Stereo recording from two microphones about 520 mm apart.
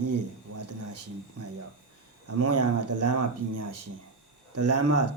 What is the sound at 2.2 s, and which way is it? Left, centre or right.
Speech, right.